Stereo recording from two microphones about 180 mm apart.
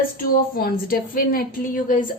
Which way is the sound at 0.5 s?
55° left (ahead or behind).